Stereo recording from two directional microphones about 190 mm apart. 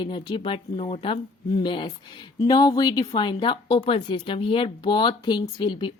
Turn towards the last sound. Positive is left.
turn(degrees=25)  # may be behind; listen again after turning